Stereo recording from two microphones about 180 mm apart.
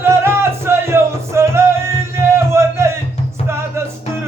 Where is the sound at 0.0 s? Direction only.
15° right (ahead or behind).